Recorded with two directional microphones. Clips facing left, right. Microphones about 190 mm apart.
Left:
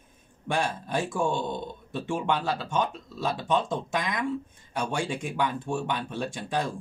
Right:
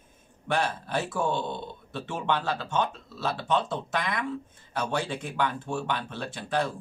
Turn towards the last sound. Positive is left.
turn(degrees=15)  # may be behind; listen again after turning